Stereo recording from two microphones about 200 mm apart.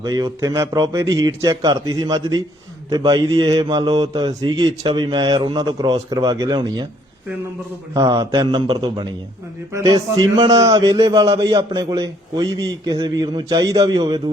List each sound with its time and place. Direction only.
0.0 s a man's voice: 15° right (ahead or behind)
7.9 s a man's voice: 15° right (ahead or behind)